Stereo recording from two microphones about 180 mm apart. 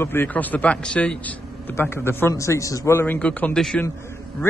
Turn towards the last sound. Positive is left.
turn(degrees=5)  # may be behind; listen again after turning